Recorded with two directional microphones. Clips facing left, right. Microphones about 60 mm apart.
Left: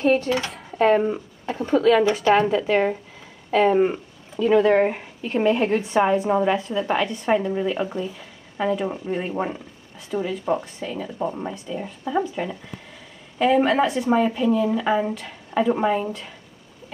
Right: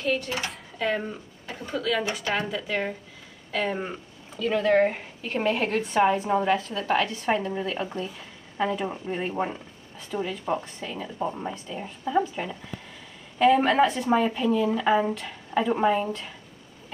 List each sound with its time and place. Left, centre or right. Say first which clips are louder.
0.0 s speech: left 8 dB; left
4.5 s speech: left 4 dB; left
10.9 s speech: left 3 dB; centre